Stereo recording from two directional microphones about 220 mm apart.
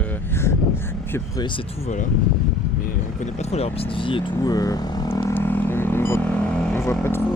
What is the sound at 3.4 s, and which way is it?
Speech, 30° left (ahead or behind).